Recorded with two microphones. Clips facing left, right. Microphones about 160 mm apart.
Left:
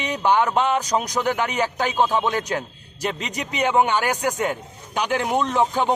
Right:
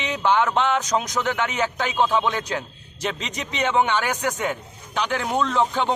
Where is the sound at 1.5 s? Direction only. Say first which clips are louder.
Left 2 dB; 40° left (ahead or behind).